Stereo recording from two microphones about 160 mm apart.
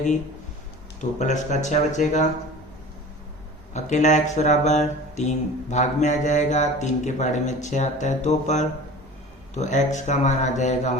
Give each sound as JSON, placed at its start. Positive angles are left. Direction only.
{"t": 1.2, "sound": "a man's voice", "side_deg": 50}
{"t": 3.8, "sound": "a man's voice", "side_deg": 50}